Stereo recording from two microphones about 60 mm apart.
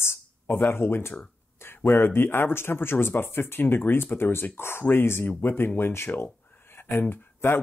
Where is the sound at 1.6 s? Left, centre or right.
Left.